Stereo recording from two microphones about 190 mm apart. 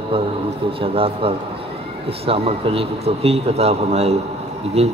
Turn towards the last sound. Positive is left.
turn(degrees=-35)  # may be behind; listen again after turning